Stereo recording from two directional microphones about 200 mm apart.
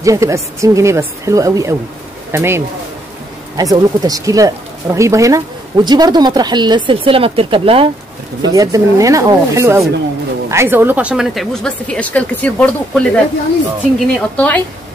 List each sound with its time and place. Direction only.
0.0 s a woman's voice: 15° right (ahead or behind)
8.4 s a woman's voice: 15° right (ahead or behind); by 14.6 s 5° left (ahead or behind)